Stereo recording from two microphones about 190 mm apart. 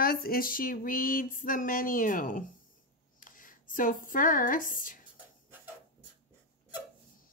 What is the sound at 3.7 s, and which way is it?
Speech, 45° left (ahead or behind).